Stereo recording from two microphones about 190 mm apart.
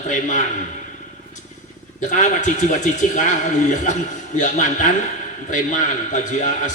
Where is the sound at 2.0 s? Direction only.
40° left (ahead or behind).